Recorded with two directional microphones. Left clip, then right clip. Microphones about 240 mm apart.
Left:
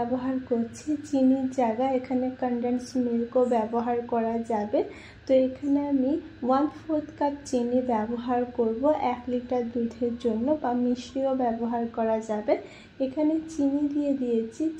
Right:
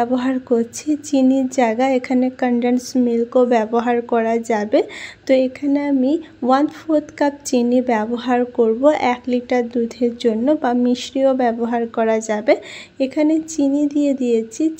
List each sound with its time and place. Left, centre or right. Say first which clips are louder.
0.1 s a woman's voice: right 10 dB; right